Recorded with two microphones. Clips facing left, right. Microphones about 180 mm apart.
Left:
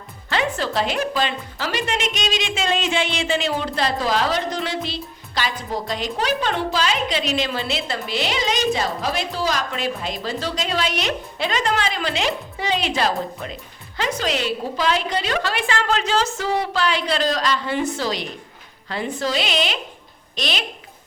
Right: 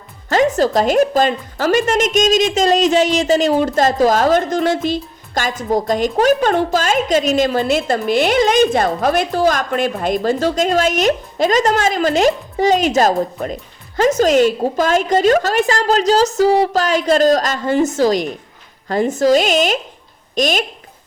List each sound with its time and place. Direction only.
0.3 s a woman's voice: 40° right (ahead or behind)